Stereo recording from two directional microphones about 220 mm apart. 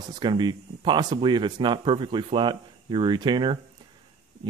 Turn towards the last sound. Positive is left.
turn(degrees=-20)  # may be behind; listen again after turning